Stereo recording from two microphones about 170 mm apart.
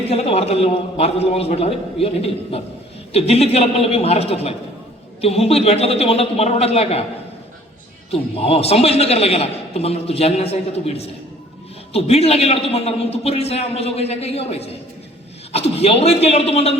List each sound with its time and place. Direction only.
0.1 s a man's voice: 35° left (ahead or behind)
8.1 s a man's voice: 35° left (ahead or behind)